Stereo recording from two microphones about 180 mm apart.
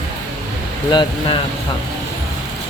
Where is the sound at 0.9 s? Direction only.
25° left (ahead or behind).